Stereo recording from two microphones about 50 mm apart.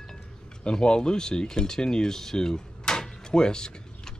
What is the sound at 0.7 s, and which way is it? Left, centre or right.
Speech, centre.